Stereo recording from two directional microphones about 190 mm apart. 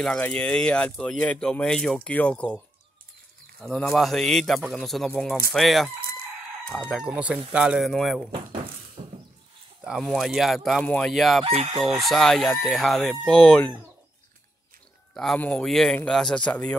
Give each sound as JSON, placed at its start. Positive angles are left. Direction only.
{"t": 0.0, "sound": "speech", "side_deg": 5}
{"t": 9.0, "sound": "a sound", "side_deg": -35}
{"t": 9.8, "sound": "speech", "side_deg": 0}
{"t": 11.4, "sound": "chicken", "side_deg": -30}
{"t": 11.7, "sound": "speech", "side_deg": 0}
{"t": 15.1, "sound": "speech", "side_deg": 5}